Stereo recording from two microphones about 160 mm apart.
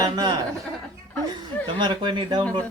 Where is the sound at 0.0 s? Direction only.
25° right (ahead or behind).